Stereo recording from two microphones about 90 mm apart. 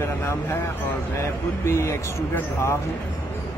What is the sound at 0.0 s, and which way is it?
Speech, 30° left (ahead or behind).